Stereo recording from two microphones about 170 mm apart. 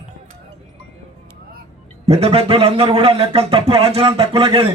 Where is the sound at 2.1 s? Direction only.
35° right (ahead or behind).